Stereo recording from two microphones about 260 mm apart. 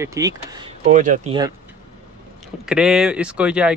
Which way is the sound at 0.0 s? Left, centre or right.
Centre.